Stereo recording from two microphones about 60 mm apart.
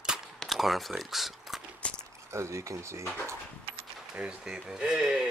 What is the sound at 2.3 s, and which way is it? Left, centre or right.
Speech, right.